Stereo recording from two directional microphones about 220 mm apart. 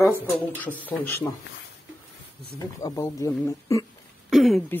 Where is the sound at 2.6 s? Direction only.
15° left (ahead or behind).